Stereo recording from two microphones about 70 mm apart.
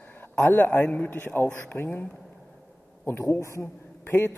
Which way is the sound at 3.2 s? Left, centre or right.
Left.